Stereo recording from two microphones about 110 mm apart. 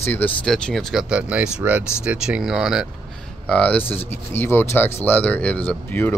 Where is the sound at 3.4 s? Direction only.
10° left (ahead or behind).